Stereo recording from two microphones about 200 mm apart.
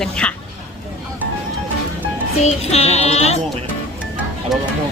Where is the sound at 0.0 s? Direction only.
5° left (ahead or behind).